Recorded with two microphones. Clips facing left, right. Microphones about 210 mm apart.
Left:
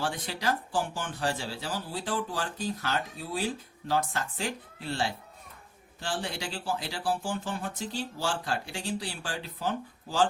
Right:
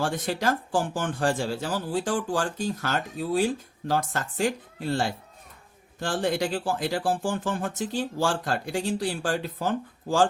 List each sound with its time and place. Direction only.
0.0 s speech: 45° right (ahead or behind)